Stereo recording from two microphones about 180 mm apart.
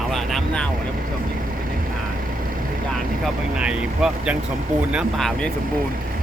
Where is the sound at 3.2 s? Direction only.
5° right (ahead or behind).